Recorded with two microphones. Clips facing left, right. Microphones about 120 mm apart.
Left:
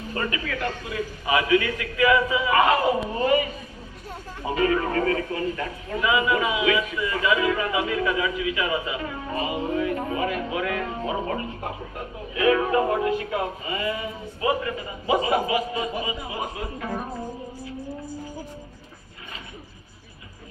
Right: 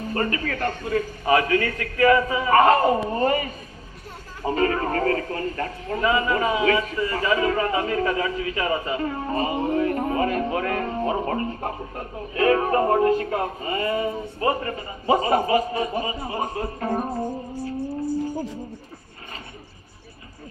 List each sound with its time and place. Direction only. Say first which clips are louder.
0.1 s speech: right 3 dB; 45° right (ahead or behind)